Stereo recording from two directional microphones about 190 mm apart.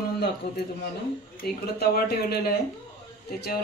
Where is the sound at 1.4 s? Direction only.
55° left (ahead or behind).